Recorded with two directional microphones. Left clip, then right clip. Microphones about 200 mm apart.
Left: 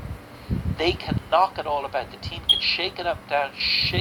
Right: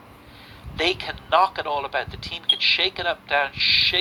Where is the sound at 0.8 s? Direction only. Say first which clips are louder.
Right 2 dB; 45° right (ahead or behind).